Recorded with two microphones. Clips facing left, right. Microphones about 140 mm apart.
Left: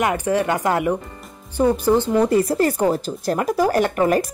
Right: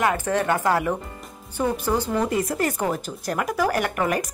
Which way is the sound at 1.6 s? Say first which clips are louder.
Left 7 dB; 30° left (ahead or behind).